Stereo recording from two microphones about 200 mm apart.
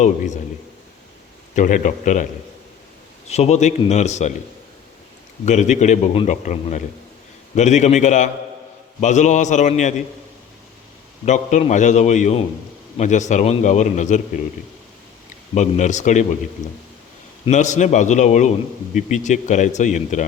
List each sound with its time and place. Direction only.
0.0 s a man's voice: 35° left (ahead or behind)
1.5 s a man's voice: 40° left (ahead or behind)
3.2 s a man's voice: 35° left (ahead or behind)
5.5 s a man's voice: 35° left (ahead or behind)
11.3 s a man's voice: 35° left (ahead or behind)
15.5 s a man's voice: 35° left (ahead or behind)